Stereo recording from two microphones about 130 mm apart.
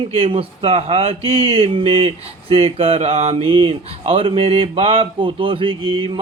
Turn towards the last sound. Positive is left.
turn(degrees=-45)  # may be behind; listen again after turning